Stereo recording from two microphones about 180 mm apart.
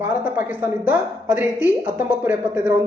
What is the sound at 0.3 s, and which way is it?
A woman's voice, 10° right (ahead or behind).